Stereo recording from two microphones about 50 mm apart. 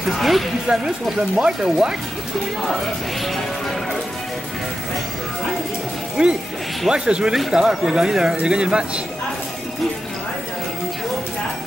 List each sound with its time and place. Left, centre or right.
0.1 s speech: centre
2.7 s speech: centre
6.2 s speech: right